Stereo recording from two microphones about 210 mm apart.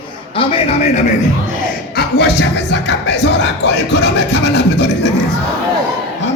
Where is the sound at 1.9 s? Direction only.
50° left (ahead or behind).